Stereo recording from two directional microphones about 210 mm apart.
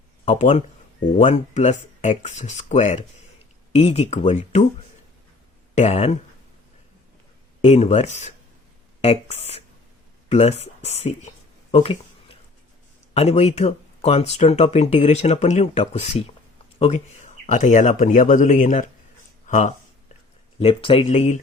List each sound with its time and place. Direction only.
0.3 s speech: 35° left (ahead or behind)
5.7 s speech: 30° left (ahead or behind)
7.6 s speech: 30° left (ahead or behind)
11.7 s a sound: 25° left (ahead or behind)
13.1 s speech: 30° left (ahead or behind)
20.6 s speech: 25° left (ahead or behind)